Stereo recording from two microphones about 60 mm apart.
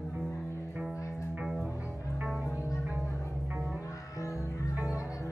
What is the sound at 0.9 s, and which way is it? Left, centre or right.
Music, left.